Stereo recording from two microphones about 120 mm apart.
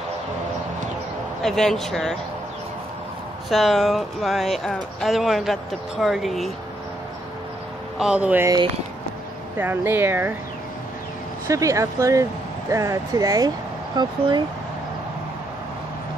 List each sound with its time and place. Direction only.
1.4 s speech: 5° left (ahead or behind)
3.4 s speech: centre (ahead or behind)
8.0 s speech: 10° right (ahead or behind)
9.6 s speech: 15° right (ahead or behind)
11.4 s speech: 25° right (ahead or behind)